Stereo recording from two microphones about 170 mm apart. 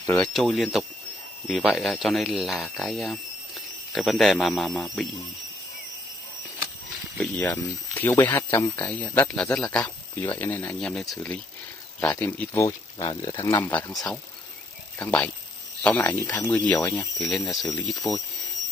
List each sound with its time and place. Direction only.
0.1 s speech: centre (ahead or behind)
7.2 s speech: 10° left (ahead or behind)
12.6 s speech: 25° left (ahead or behind)
17.2 s speech: centre (ahead or behind)